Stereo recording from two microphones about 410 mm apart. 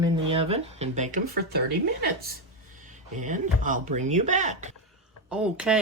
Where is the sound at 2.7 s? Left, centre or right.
Centre.